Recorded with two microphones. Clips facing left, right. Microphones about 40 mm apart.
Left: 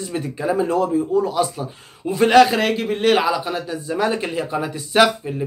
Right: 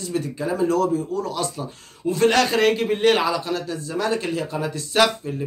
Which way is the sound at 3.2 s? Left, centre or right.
Left.